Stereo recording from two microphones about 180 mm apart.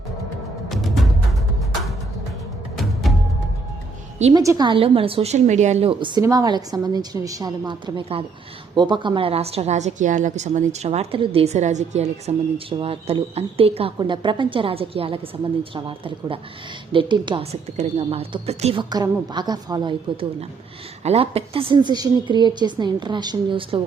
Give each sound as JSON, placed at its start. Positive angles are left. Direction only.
{"t": 0.7, "sound": "music", "side_deg": 0}
{"t": 4.4, "sound": "a woman's voice", "side_deg": -20}